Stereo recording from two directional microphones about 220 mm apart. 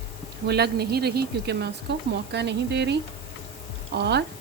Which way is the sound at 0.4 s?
45° right (ahead or behind).